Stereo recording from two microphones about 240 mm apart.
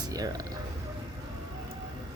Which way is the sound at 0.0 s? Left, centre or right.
Centre.